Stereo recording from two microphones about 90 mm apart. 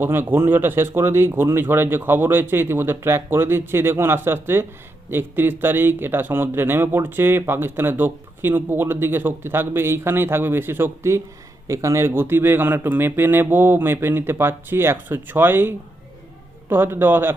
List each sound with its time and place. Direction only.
0.0 s speech: 25° right (ahead or behind)